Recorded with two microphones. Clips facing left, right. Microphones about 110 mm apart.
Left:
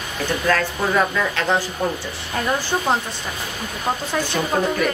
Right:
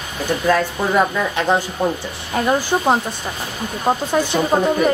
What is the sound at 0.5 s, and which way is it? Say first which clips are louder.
A woman's voice: right 3 dB; 15° right (ahead or behind).